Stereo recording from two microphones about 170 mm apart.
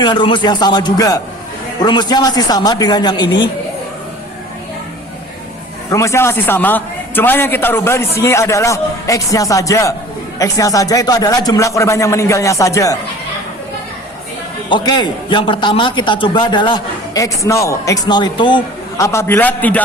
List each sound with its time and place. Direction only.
0.0 s a man's voice: 25° left (ahead or behind)
5.9 s a man's voice: 15° left (ahead or behind)
14.7 s a man's voice: 25° left (ahead or behind)
19.0 s a man's voice: 15° left (ahead or behind)